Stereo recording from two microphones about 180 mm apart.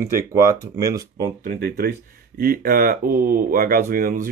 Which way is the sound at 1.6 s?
60° right (ahead or behind).